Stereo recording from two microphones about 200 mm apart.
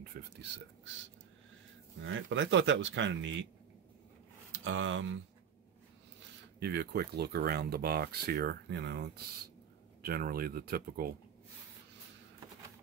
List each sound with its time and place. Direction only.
0.0 s speech: 55° right (ahead or behind)
2.0 s speech: 70° right (ahead or behind)
4.5 s a sound: 75° right (ahead or behind)
6.6 s speech: 55° right (ahead or behind)